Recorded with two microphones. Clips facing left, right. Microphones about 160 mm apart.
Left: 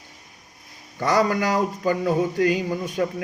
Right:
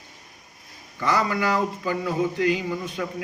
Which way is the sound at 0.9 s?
45° left (ahead or behind).